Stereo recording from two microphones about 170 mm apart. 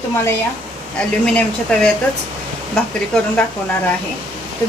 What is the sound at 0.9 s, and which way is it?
Speech, 5° left (ahead or behind).